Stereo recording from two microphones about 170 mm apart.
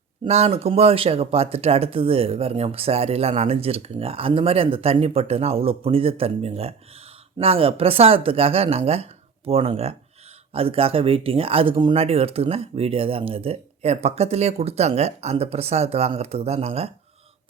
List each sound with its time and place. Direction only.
0.3 s speech: 40° right (ahead or behind)